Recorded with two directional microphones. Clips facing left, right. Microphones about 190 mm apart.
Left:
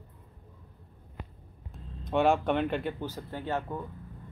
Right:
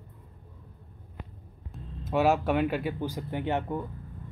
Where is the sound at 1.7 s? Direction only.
5° right (ahead or behind).